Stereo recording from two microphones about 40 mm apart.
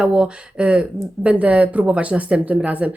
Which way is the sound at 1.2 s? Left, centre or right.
Right.